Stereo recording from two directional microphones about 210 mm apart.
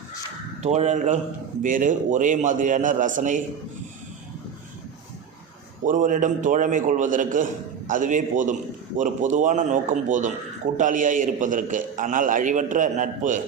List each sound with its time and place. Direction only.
0.6 s a man's voice: 35° right (ahead or behind)
5.8 s a man's voice: 40° right (ahead or behind)